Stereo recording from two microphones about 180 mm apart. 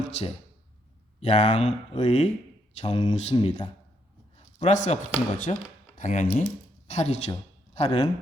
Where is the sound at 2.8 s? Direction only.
25° left (ahead or behind).